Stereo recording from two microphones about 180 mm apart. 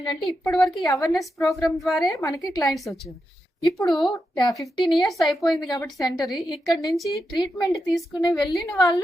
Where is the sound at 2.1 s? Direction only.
15° left (ahead or behind).